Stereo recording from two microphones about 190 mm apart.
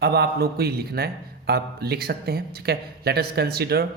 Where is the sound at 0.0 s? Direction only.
55° right (ahead or behind).